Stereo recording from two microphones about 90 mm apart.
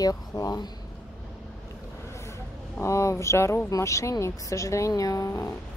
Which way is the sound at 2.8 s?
30° left (ahead or behind).